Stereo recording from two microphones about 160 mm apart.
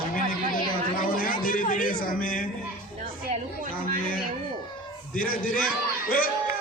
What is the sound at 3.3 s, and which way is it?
Chatter, 55° right (ahead or behind).